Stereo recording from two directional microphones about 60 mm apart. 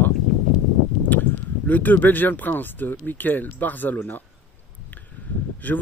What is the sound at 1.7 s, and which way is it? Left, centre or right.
Speech, left.